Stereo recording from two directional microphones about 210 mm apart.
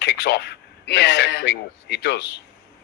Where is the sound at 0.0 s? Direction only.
55° left (ahead or behind).